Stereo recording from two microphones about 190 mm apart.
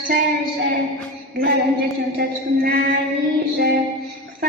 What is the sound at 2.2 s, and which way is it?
Speech, 55° right (ahead or behind).